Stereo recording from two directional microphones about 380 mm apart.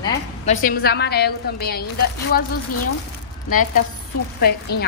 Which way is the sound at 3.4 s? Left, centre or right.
Left.